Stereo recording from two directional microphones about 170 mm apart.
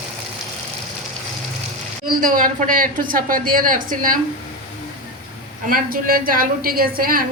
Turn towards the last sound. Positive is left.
turn(degrees=-60)  # may be behind; listen again after turning